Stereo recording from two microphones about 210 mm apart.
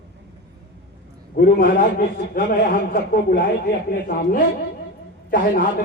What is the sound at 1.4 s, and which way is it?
A man's voice, 45° left (ahead or behind).